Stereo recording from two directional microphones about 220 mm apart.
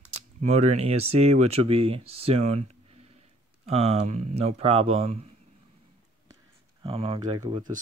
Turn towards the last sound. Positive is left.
turn(degrees=-20)  # may be behind; listen again after turning